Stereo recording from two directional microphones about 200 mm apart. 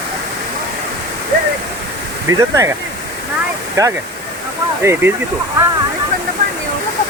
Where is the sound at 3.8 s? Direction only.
15° right (ahead or behind).